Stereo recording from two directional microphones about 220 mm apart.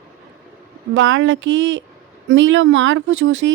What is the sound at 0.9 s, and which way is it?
Speech, 60° right (ahead or behind).